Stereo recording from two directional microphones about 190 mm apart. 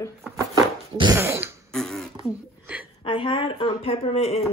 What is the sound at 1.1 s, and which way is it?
Throat clearing, 10° right (ahead or behind).